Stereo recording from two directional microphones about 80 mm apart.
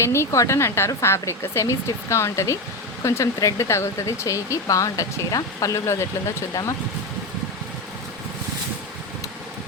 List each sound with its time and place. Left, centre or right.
0.0 s speech: left